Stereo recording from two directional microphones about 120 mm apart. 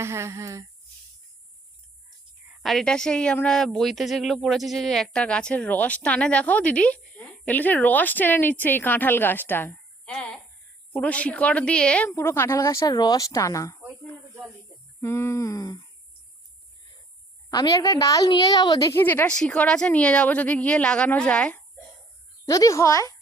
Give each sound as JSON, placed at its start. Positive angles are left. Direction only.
{"t": 0.0, "sound": "speech", "side_deg": -25}
{"t": 2.6, "sound": "a woman's voice", "side_deg": 5}
{"t": 10.1, "sound": "a woman's voice", "side_deg": 5}
{"t": 12.1, "sound": "speech", "side_deg": 20}
{"t": 15.0, "sound": "speech", "side_deg": 20}
{"t": 17.5, "sound": "a woman's voice", "side_deg": 35}
{"t": 18.9, "sound": "a woman's voice", "side_deg": 20}
{"t": 22.4, "sound": "speech", "side_deg": 25}